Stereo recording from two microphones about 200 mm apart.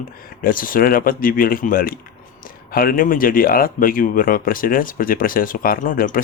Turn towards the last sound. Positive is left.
turn(degrees=45)  # may be behind; listen again after turning